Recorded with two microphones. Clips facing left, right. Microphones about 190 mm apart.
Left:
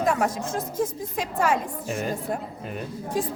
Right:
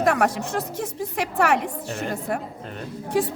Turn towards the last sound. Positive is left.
turn(degrees=-70)  # may be behind; listen again after turning